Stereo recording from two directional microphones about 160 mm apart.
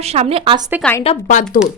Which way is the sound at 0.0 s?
40° right (ahead or behind).